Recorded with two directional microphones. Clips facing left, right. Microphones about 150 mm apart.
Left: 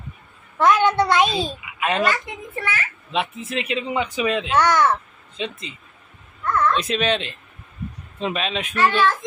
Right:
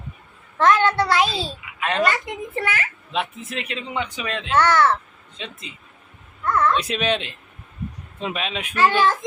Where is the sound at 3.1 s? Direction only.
Centre (ahead or behind).